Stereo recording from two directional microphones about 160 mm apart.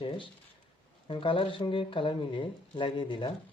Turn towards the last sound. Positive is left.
turn(degrees=30)  # may be behind; listen again after turning